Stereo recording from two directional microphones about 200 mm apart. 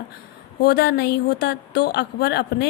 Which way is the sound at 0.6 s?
50° left (ahead or behind).